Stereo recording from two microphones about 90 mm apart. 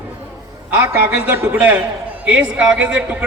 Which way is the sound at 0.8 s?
20° right (ahead or behind).